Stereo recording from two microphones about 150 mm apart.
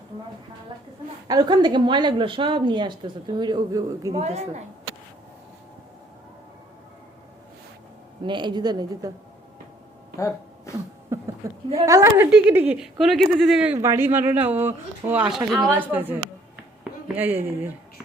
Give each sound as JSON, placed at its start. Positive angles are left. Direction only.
{"t": 1.3, "sound": "a woman's voice", "side_deg": -30}
{"t": 4.1, "sound": "a woman's voice", "side_deg": -45}
{"t": 8.2, "sound": "speech", "side_deg": -30}
{"t": 11.1, "sound": "a sound", "side_deg": -20}
{"t": 11.7, "sound": "a woman's voice", "side_deg": -20}
{"t": 13.7, "sound": "a woman's voice", "side_deg": -15}
{"t": 17.2, "sound": "a woman's voice", "side_deg": -10}